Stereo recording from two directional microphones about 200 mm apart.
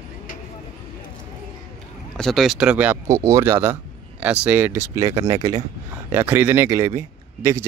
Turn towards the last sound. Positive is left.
turn(degrees=-15)  # may be behind; listen again after turning